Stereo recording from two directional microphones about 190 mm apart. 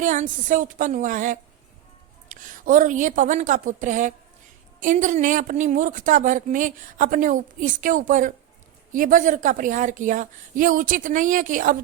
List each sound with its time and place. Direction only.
0.0 s speech: 40° right (ahead or behind)